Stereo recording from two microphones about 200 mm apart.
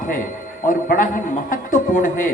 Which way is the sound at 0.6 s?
40° left (ahead or behind).